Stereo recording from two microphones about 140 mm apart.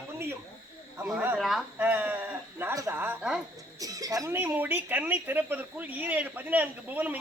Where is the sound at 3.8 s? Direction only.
25° right (ahead or behind).